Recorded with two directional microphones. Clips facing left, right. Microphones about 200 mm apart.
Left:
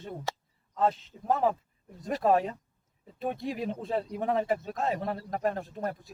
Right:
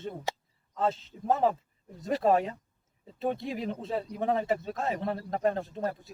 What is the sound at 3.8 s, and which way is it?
A man's voice, 30° right (ahead or behind).